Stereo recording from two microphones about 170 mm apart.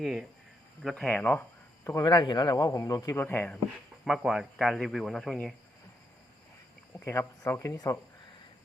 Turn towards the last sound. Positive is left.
turn(degrees=20)  # may be behind; listen again after turning